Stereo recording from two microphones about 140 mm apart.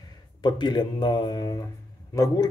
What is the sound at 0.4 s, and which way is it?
Speech, 30° left (ahead or behind).